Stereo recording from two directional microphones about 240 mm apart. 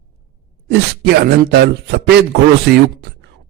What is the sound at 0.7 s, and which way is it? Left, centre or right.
A man's voice, right.